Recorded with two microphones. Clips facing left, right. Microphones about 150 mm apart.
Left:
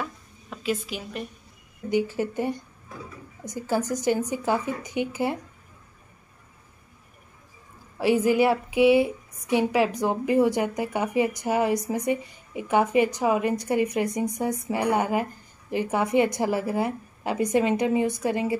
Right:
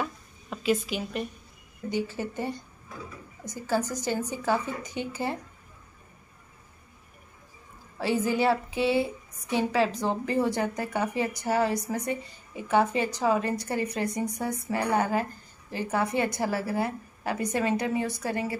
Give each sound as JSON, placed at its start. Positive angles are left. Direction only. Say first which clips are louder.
{"t": 0.0, "sound": "a sound", "louder": "right 1 dB", "side_deg": 0}
{"t": 1.9, "sound": "speech", "louder": "left 5 dB", "side_deg": 15}
{"t": 8.0, "sound": "a woman's voice", "louder": "left 5 dB", "side_deg": 15}